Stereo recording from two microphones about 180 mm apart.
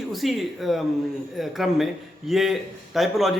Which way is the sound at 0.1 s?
Centre (ahead or behind).